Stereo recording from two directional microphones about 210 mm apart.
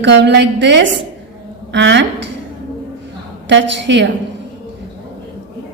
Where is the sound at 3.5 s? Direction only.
55° right (ahead or behind).